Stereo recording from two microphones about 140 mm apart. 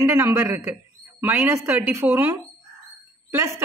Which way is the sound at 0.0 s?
20° right (ahead or behind).